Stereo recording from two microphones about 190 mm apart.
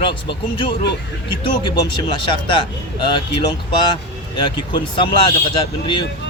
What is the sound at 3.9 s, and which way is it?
Speech, 25° left (ahead or behind).